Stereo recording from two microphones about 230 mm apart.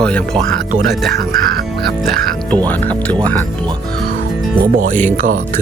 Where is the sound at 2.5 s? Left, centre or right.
Centre.